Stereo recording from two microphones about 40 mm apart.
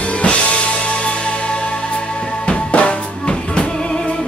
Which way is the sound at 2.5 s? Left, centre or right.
Left.